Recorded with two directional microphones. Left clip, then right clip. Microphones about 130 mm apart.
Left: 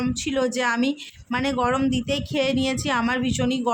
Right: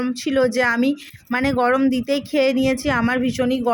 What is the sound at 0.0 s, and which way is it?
Speech, 30° right (ahead or behind).